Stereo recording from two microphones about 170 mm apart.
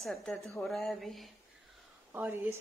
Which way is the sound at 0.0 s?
5° left (ahead or behind).